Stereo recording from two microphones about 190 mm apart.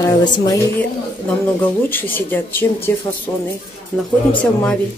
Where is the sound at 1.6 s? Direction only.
10° left (ahead or behind).